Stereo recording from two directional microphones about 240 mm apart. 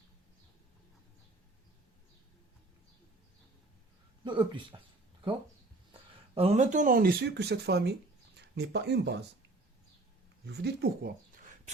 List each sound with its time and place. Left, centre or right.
4.2 s speech: centre
5.9 s speech: right
10.4 s speech: right